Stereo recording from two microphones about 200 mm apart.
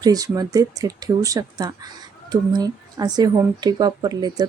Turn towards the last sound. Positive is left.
turn(degrees=-20)  # may be behind; listen again after turning